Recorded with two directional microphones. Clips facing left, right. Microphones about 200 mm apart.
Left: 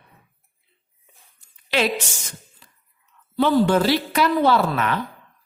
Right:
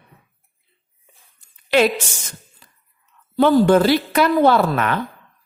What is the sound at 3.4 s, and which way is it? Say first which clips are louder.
A woman's voice: right 4 dB; 50° right (ahead or behind).